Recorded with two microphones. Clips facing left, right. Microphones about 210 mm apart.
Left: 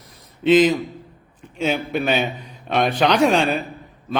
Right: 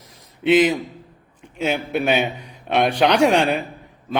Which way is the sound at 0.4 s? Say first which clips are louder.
Left 1 dB; 60° right (ahead or behind).